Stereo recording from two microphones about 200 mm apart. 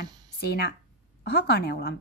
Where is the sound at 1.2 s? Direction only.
55° left (ahead or behind).